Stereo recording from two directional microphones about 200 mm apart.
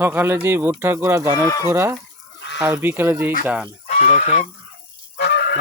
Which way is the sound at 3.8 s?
35° left (ahead or behind).